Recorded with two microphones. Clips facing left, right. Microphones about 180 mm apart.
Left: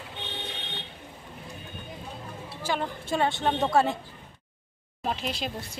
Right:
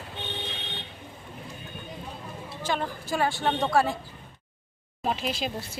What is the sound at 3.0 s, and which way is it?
Speech, 25° left (ahead or behind).